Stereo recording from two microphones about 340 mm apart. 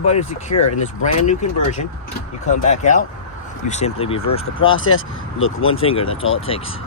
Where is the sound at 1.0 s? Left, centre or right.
Left.